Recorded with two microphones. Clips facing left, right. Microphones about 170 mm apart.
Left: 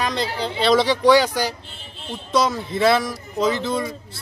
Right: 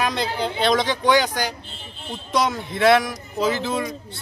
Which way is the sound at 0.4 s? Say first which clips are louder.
Left 3 dB; 5° left (ahead or behind).